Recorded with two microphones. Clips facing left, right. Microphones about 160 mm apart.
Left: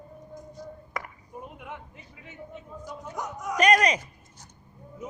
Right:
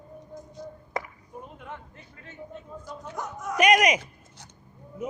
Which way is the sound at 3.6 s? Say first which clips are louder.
Right 1 dB; 15° right (ahead or behind).